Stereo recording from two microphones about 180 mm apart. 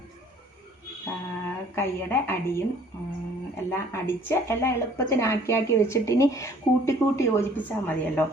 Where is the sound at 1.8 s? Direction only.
15° left (ahead or behind).